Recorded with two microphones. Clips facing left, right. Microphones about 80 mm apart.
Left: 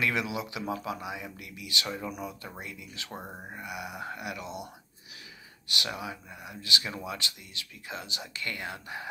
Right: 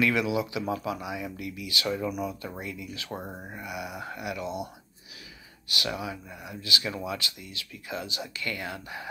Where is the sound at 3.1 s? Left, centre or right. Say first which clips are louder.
Right 2 dB; centre.